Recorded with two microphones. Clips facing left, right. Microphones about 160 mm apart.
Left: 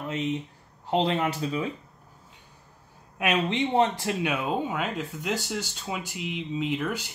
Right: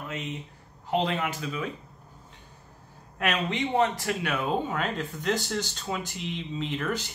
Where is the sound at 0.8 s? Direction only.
30° left (ahead or behind).